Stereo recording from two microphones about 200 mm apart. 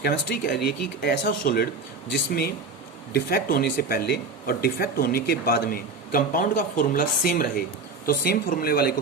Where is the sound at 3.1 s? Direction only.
50° left (ahead or behind).